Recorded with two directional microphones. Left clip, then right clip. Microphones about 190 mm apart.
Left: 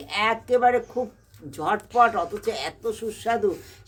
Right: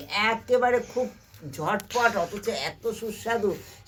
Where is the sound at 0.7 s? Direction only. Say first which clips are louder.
Left 1 dB; centre (ahead or behind).